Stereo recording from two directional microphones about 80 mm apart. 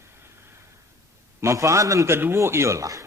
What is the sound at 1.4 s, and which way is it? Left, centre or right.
A man's voice, right.